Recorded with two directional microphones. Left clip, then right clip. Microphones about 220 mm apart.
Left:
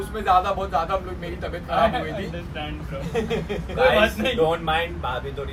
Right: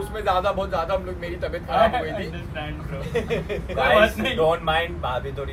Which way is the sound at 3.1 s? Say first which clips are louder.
Right 1 dB; centre (ahead or behind).